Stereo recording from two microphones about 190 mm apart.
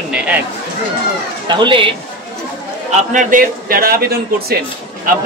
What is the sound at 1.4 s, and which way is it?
Speech, 25° right (ahead or behind).